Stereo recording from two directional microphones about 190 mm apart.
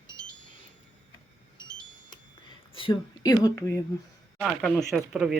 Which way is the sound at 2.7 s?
25° left (ahead or behind).